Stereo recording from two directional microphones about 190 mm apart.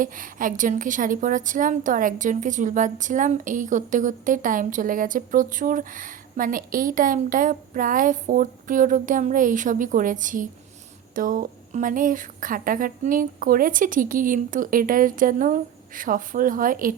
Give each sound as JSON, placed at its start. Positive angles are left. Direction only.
{"t": 0.0, "sound": "a woman's voice", "side_deg": -45}